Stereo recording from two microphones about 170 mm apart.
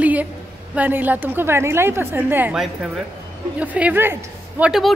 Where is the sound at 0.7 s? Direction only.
10° right (ahead or behind).